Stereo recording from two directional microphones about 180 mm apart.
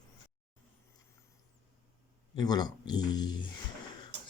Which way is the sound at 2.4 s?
20° left (ahead or behind).